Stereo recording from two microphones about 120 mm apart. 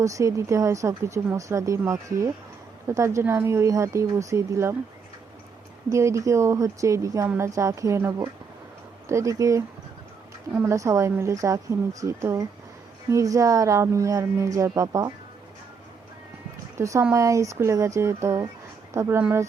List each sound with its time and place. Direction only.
0.0 s speech: 25° right (ahead or behind)
5.9 s speech: 25° right (ahead or behind)
16.7 s speech: 25° right (ahead or behind)